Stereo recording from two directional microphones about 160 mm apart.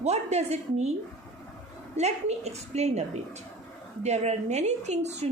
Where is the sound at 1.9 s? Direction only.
45° right (ahead or behind).